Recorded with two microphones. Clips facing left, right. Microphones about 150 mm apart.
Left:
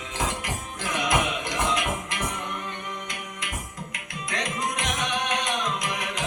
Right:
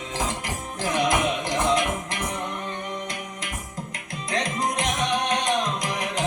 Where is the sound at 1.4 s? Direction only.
35° right (ahead or behind).